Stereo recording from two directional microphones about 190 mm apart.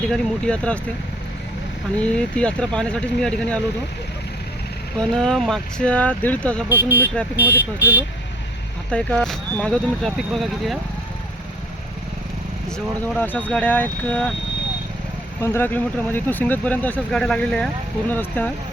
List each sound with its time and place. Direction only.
0.1 s speech: 5° left (ahead or behind)
2.0 s speech: 5° left (ahead or behind)
4.9 s speech: 5° left (ahead or behind)
6.7 s speech: 10° right (ahead or behind)
8.9 s speech: 5° left (ahead or behind)
12.7 s speech: 10° left (ahead or behind)
15.4 s speech: 15° left (ahead or behind)